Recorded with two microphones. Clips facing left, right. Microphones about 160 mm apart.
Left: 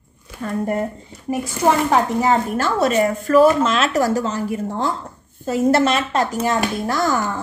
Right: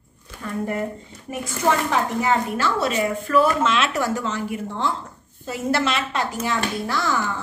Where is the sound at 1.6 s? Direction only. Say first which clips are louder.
Left 4 dB; 40° left (ahead or behind).